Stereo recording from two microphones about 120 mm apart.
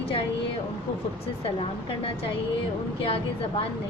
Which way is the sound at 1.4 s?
50° left (ahead or behind).